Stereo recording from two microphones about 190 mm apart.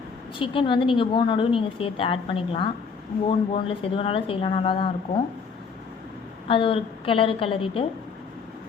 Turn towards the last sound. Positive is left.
turn(degrees=30)  # may be behind; listen again after turning